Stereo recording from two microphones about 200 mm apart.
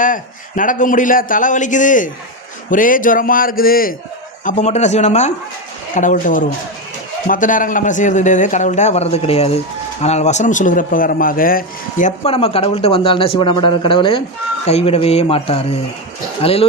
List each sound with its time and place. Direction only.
0.0 s a man's voice: 40° left (ahead or behind)
4.4 s a man's voice: 35° left (ahead or behind)